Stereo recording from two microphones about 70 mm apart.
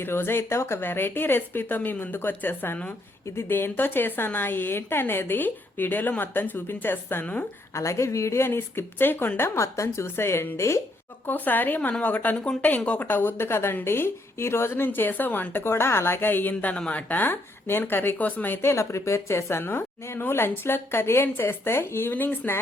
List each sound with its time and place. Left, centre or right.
0.0 s a woman's voice: left
7.8 s speech: left
9.4 s speech: left
11.3 s a woman's voice: left